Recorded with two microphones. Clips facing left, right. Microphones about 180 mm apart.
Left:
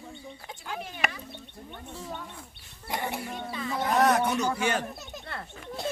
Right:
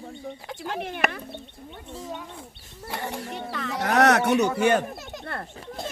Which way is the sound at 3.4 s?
75° right (ahead or behind).